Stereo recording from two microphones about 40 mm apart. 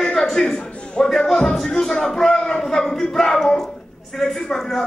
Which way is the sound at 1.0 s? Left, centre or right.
Centre.